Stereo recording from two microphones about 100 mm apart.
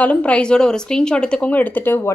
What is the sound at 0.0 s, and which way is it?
Speech, 15° left (ahead or behind).